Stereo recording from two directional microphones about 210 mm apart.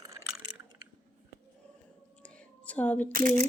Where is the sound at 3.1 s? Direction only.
40° right (ahead or behind).